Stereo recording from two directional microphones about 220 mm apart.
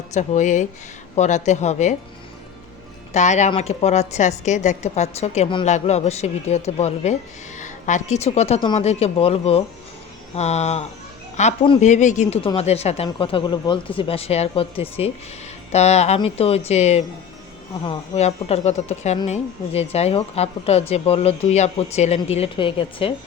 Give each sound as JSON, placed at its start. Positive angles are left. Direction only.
{"t": 0.1, "sound": "speech", "side_deg": 35}
{"t": 3.1, "sound": "a woman's voice", "side_deg": 30}